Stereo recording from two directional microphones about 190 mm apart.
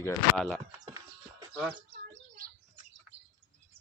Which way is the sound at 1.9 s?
55° right (ahead or behind).